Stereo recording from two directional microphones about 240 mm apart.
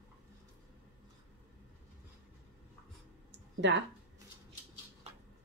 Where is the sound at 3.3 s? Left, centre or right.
Right.